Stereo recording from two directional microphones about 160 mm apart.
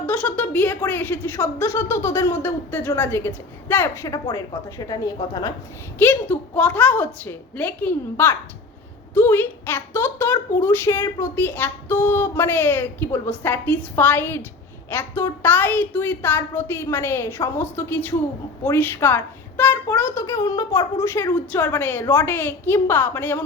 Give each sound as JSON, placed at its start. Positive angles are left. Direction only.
{"t": 0.0, "sound": "a woman's voice", "side_deg": 10}
{"t": 6.0, "sound": "a woman's voice", "side_deg": 10}